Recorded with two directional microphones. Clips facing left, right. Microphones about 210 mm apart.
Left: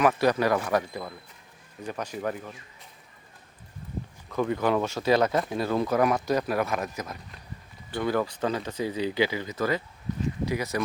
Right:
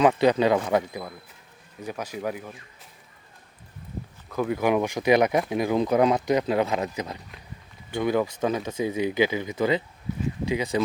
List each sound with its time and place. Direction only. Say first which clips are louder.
0.0 s speech: right 3 dB; 20° right (ahead or behind)
0.8 s speech: right 2 dB; 10° right (ahead or behind)
4.3 s speech: right 2 dB; 5° right (ahead or behind)